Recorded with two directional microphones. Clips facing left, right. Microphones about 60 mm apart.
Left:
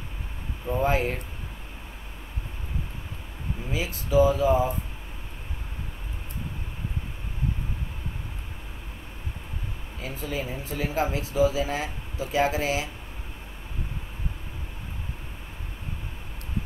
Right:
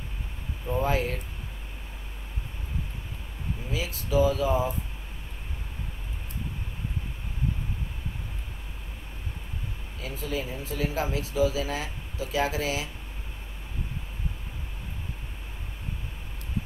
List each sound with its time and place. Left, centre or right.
0.8 s speech: left
3.7 s speech: left
10.0 s speech: left